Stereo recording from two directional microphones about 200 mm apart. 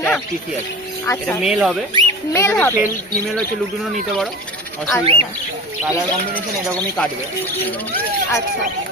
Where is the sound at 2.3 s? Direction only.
10° left (ahead or behind).